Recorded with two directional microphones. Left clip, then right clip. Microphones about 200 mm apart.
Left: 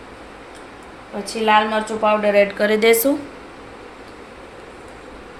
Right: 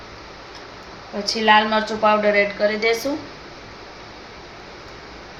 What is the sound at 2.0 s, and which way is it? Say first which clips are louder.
Speech: left 2 dB; 30° left (ahead or behind).